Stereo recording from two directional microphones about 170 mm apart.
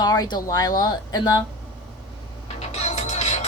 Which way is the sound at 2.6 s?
40° left (ahead or behind).